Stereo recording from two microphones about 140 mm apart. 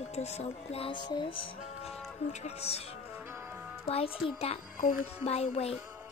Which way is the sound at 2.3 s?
50° left (ahead or behind).